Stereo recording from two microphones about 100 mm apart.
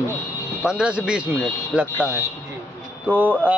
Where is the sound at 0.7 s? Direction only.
10° right (ahead or behind).